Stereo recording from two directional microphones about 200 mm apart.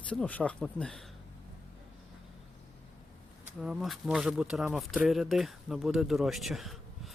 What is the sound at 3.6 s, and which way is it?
Speech, centre (ahead or behind).